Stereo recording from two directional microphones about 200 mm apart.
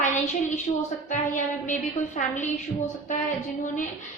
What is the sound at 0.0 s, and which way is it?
A woman's voice, 40° left (ahead or behind).